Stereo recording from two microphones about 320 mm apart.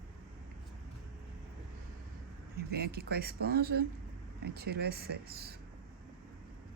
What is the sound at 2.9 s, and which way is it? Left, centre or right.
Speech, right.